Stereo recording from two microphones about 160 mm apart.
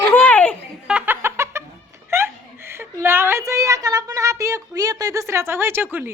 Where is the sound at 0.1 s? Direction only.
10° left (ahead or behind).